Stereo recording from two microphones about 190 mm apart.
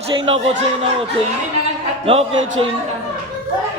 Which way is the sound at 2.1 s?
30° right (ahead or behind).